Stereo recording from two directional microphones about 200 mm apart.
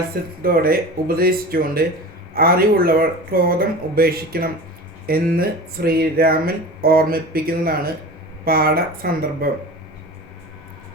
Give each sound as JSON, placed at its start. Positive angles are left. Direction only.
{"t": 0.4, "sound": "speech", "side_deg": -50}